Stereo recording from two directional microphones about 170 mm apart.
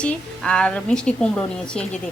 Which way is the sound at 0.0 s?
5° left (ahead or behind).